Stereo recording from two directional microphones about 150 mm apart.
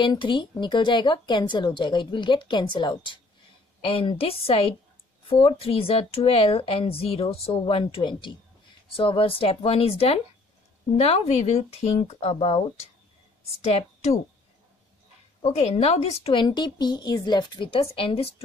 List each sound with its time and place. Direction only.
0.0 s a woman's voice: 30° left (ahead or behind)
15.4 s a woman's voice: 45° left (ahead or behind)